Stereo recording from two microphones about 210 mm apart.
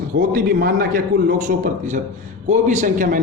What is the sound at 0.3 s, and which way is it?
A man's voice, 45° right (ahead or behind).